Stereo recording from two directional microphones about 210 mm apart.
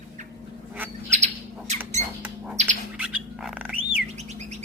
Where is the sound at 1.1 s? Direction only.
35° right (ahead or behind).